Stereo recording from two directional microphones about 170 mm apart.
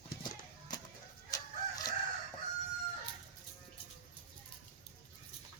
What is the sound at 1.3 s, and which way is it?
Crowing, 20° left (ahead or behind).